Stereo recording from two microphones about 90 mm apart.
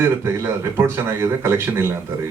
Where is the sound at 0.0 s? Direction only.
30° right (ahead or behind).